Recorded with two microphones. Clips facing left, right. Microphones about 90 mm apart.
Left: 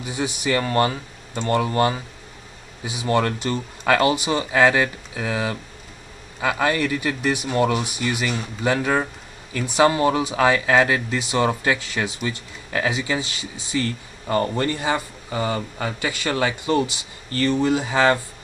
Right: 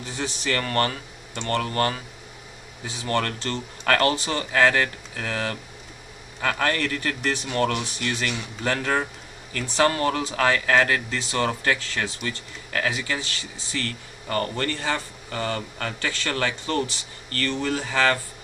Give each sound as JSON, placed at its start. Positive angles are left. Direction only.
{"t": 0.0, "sound": "speech", "side_deg": 15}